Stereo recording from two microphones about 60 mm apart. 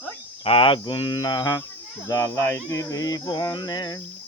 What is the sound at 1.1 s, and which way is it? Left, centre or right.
Speech, left.